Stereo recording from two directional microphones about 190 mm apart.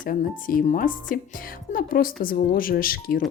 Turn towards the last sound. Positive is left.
turn(degrees=50)  # may be behind; listen again after turning